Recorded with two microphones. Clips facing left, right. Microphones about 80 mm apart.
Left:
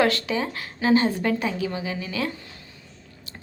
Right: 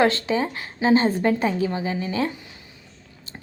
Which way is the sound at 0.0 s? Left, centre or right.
Right.